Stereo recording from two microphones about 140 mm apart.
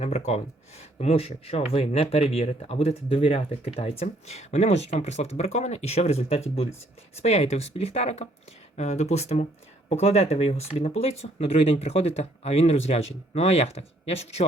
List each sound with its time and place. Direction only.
0.0 s speech: 50° left (ahead or behind)